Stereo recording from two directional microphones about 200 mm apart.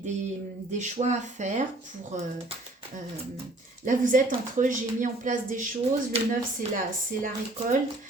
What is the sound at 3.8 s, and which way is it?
A woman's voice, 40° right (ahead or behind).